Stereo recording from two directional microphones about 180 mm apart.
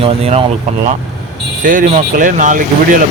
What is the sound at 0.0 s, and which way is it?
Speech, 35° right (ahead or behind).